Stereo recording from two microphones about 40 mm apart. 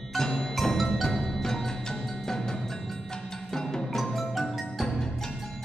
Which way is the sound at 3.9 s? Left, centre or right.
Centre.